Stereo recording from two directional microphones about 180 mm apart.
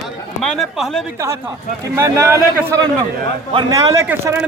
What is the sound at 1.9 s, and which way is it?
A man's voice, 15° right (ahead or behind).